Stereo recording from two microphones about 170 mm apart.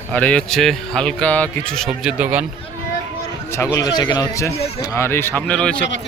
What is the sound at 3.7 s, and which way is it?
Speech, 20° left (ahead or behind).